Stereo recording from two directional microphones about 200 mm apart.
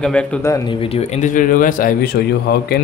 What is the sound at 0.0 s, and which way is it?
Speech, 5° left (ahead or behind).